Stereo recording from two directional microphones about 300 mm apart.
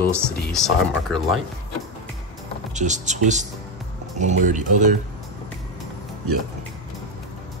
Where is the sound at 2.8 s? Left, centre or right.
Right.